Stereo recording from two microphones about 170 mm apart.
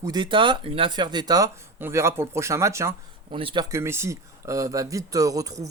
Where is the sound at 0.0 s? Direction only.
25° right (ahead or behind).